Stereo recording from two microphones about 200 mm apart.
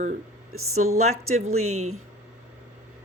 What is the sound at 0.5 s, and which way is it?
Speech, 90° right.